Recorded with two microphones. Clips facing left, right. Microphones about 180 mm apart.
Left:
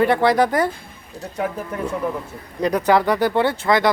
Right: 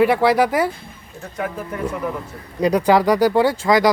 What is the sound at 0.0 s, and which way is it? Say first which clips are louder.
Speech: right 1 dB; 5° right (ahead or behind).